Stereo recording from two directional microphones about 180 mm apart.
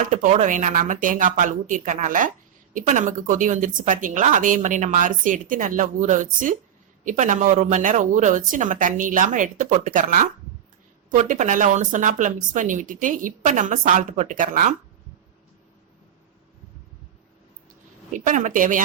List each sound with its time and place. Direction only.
0.0 s speech: 45° right (ahead or behind)
18.1 s speech: 45° right (ahead or behind)